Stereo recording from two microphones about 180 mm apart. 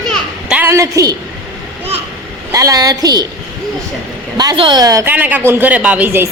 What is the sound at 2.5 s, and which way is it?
Speech, 20° right (ahead or behind).